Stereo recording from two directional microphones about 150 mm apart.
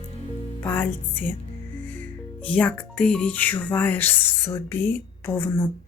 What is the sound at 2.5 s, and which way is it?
Speech, 10° left (ahead or behind).